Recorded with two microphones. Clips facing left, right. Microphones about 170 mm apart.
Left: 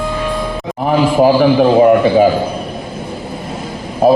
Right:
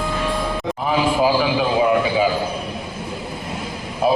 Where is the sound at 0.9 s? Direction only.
45° left (ahead or behind).